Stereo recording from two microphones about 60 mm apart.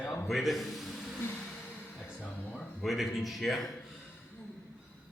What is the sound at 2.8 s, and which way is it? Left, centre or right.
Speech, centre.